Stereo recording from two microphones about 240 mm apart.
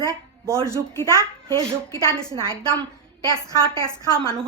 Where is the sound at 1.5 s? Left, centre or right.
Centre.